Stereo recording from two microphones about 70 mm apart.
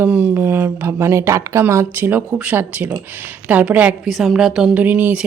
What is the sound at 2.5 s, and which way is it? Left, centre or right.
Speech, right.